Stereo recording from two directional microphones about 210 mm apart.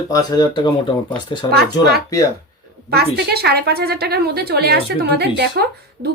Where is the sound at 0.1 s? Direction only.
20° left (ahead or behind).